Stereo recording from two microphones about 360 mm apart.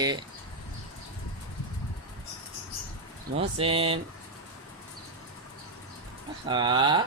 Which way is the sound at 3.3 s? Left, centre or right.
Centre.